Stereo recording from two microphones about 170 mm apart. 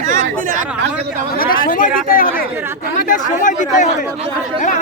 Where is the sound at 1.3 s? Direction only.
55° left (ahead or behind).